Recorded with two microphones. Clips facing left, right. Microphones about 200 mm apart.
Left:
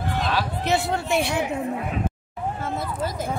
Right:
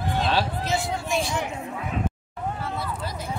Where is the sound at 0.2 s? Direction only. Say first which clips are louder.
Right 2 dB; 30° right (ahead or behind).